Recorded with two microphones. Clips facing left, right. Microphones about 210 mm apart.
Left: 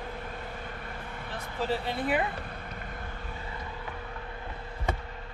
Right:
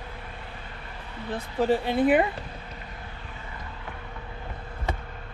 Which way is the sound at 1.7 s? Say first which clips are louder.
Right 8 dB; 55° right (ahead or behind).